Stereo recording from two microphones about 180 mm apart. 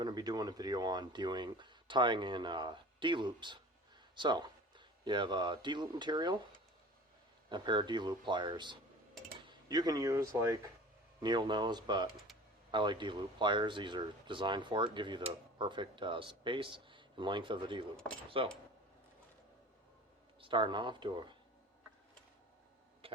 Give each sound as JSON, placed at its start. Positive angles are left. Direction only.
{"t": 0.0, "sound": "speech", "side_deg": -20}
{"t": 7.5, "sound": "speech", "side_deg": -25}
{"t": 20.4, "sound": "speech", "side_deg": -25}
{"t": 23.0, "sound": "a sound", "side_deg": -30}